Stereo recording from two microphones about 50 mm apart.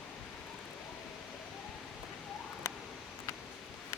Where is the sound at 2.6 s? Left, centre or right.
Left.